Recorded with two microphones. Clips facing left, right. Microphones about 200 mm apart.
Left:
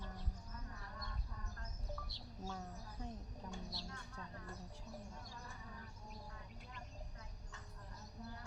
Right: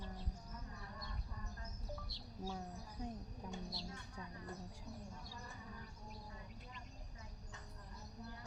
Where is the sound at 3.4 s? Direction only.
10° right (ahead or behind).